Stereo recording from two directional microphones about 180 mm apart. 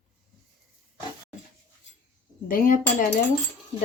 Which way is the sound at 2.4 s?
50° left (ahead or behind).